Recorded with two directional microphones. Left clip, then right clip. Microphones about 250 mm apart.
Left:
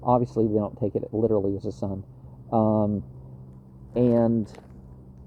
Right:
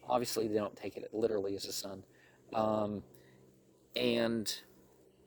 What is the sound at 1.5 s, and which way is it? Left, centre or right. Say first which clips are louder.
Speech: left 9 dB; right.